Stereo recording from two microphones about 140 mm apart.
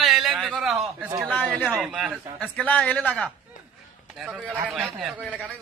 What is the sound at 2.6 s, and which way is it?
Speech, 10° left (ahead or behind).